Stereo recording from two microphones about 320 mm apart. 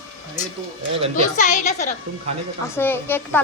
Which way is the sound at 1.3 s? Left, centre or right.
Left.